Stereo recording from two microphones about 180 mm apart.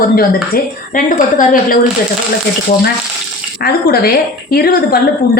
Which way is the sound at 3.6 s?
60° left (ahead or behind).